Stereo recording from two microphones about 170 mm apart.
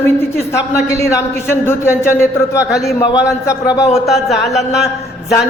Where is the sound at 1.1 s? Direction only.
15° left (ahead or behind).